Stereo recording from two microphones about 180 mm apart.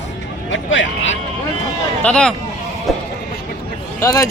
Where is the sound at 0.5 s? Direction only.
90° left.